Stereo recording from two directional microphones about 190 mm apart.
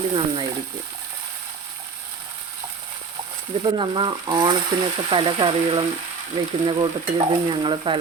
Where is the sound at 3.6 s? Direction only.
25° right (ahead or behind).